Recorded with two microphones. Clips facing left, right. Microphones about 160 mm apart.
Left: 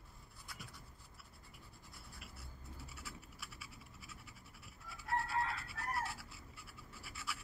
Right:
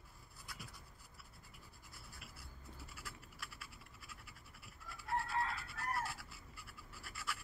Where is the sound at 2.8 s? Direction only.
Centre (ahead or behind).